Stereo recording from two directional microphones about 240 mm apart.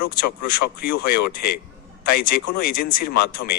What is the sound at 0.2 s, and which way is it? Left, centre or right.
A man's voice, left.